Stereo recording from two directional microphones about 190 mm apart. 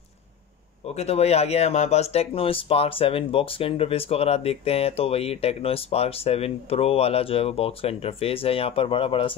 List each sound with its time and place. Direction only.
0.8 s speech: 35° left (ahead or behind)